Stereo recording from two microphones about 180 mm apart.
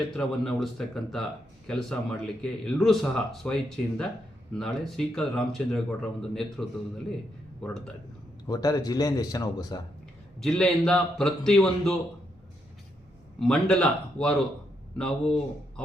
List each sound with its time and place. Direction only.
0.2 s speech: centre (ahead or behind)
8.4 s speech: 20° left (ahead or behind)
10.4 s speech: 5° left (ahead or behind)
13.4 s speech: 5° left (ahead or behind)